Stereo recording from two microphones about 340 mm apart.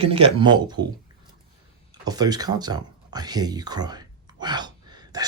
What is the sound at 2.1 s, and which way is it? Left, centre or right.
Speech, centre.